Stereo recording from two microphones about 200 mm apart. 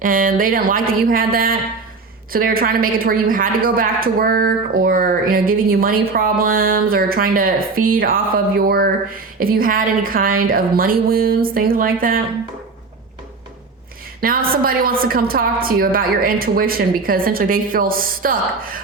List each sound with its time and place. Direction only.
0.0 s a woman's voice: 45° right (ahead or behind)
14.2 s a woman's voice: 45° right (ahead or behind)